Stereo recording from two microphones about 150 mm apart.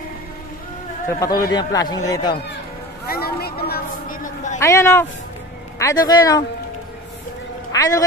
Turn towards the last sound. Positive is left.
turn(degrees=20)  # may be behind; listen again after turning